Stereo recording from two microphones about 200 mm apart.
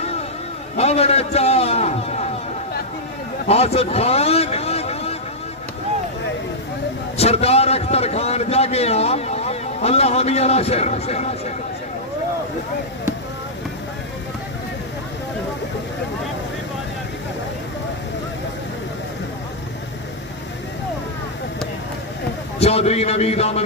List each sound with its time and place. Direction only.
0.7 s a man's voice: 30° left (ahead or behind)
3.4 s vehicle: 30° left (ahead or behind)
7.2 s a man's voice: 30° left (ahead or behind)
22.6 s a man's voice: 30° left (ahead or behind)